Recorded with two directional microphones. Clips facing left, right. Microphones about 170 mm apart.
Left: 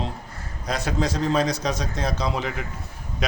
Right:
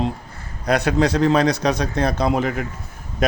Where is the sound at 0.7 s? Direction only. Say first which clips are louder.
Right 7 dB; 65° right (ahead or behind).